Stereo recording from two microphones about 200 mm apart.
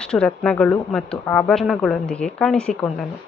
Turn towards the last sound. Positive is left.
turn(degrees=5)  # may be behind; listen again after turning